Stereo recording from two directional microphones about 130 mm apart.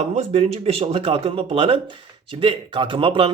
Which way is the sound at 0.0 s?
60° right (ahead or behind).